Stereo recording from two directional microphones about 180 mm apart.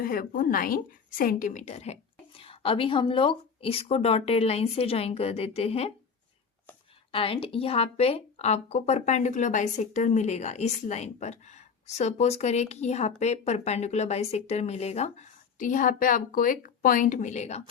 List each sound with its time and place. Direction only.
0.0 s speech: 55° left (ahead or behind); by 5.9 s 35° left (ahead or behind)
7.1 s speech: 30° left (ahead or behind)